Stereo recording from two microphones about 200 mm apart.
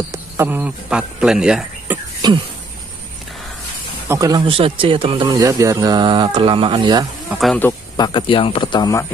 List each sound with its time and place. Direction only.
0.1 s speech: 10° right (ahead or behind)
2.2 s a sound: 20° right (ahead or behind)
4.1 s speech: 20° right (ahead or behind)
7.2 s speech: centre (ahead or behind)
8.0 s speech: 25° left (ahead or behind)